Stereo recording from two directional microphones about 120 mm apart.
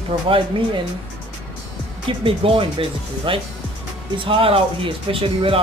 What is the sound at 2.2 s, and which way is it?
A man's voice, 50° right (ahead or behind).